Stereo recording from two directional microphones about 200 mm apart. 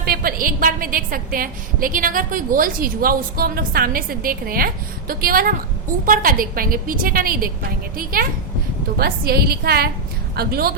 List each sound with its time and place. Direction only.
0.0 s a woman's voice: 50° right (ahead or behind)